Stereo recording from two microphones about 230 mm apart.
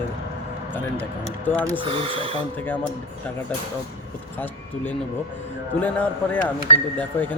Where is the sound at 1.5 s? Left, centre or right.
Centre.